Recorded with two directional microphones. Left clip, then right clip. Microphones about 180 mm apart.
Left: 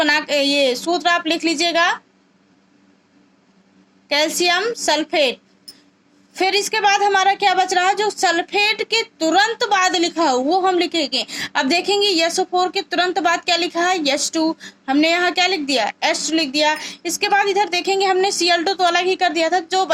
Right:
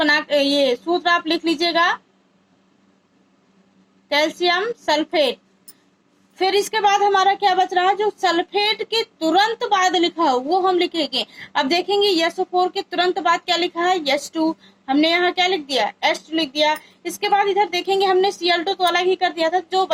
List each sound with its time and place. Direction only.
0.0 s a woman's voice: 30° left (ahead or behind)
4.1 s a woman's voice: 30° left (ahead or behind)